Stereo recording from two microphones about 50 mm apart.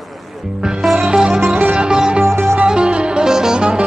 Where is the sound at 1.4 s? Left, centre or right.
Right.